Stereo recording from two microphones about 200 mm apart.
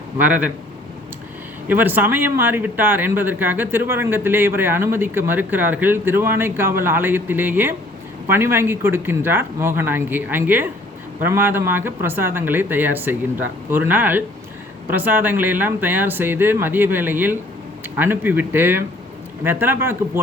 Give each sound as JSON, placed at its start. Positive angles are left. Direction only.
{"t": 0.2, "sound": "speech", "side_deg": -10}
{"t": 1.6, "sound": "speech", "side_deg": -10}